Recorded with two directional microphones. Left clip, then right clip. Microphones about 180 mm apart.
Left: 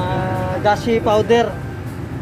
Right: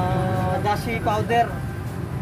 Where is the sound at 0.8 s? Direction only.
25° left (ahead or behind).